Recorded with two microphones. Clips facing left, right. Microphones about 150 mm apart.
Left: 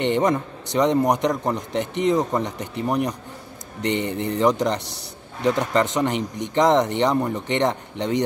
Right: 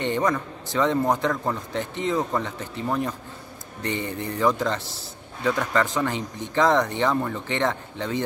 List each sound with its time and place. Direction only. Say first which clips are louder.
0.0 s a man's voice: left 4 dB; 20° left (ahead or behind)